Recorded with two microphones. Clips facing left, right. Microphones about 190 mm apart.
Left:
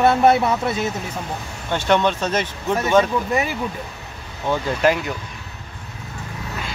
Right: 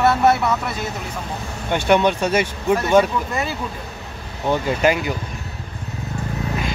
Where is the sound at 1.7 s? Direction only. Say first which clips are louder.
Right 2 dB; 10° right (ahead or behind).